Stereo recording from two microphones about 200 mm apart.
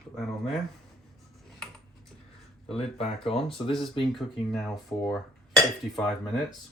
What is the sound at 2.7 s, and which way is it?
Speech, 30° left (ahead or behind).